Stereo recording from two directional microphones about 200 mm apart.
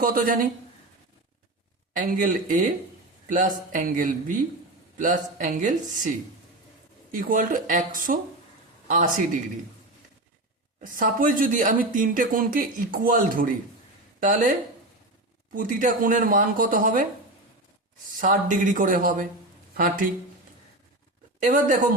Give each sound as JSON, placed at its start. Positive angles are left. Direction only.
{"t": 0.0, "sound": "speech", "side_deg": -45}
{"t": 1.9, "sound": "speech", "side_deg": -40}
{"t": 10.9, "sound": "speech", "side_deg": -40}
{"t": 15.5, "sound": "speech", "side_deg": -40}
{"t": 18.2, "sound": "speech", "side_deg": -40}
{"t": 21.4, "sound": "speech", "side_deg": -40}